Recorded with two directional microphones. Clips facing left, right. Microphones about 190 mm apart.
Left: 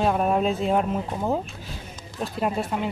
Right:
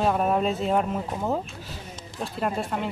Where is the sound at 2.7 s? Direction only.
10° left (ahead or behind).